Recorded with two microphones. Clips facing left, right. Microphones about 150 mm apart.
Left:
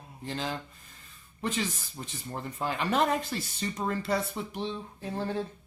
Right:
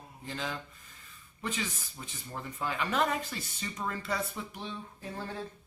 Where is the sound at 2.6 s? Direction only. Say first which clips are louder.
Left 3 dB; 30° left (ahead or behind).